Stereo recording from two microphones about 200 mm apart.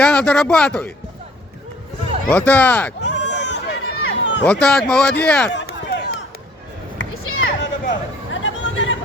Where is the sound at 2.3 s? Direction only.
5° left (ahead or behind).